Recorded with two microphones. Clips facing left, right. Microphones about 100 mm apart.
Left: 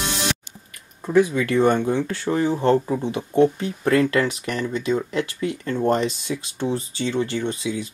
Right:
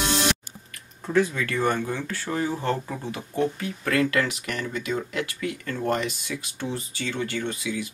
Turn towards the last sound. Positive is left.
turn(degrees=30)  # may be behind; listen again after turning